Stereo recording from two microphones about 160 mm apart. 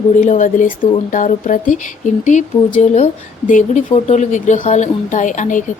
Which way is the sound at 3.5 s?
50° left (ahead or behind).